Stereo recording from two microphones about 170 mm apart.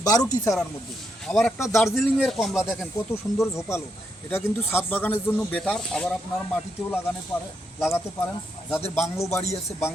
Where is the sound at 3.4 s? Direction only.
15° left (ahead or behind).